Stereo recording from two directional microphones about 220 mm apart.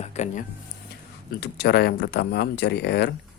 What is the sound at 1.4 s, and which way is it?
Speech, 45° left (ahead or behind).